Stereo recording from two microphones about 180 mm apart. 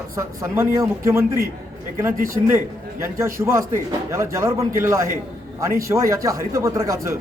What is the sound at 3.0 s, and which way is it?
A man's voice, 15° right (ahead or behind).